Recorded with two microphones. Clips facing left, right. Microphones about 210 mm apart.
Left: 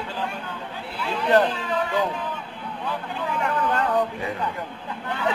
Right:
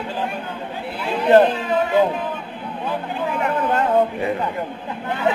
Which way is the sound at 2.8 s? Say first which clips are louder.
Right 5 dB; 15° right (ahead or behind).